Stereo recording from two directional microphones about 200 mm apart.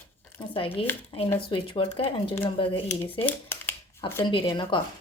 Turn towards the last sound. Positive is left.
turn(degrees=25)  # may be behind; listen again after turning